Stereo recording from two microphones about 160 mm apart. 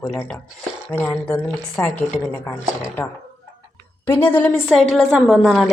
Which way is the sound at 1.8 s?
10° left (ahead or behind).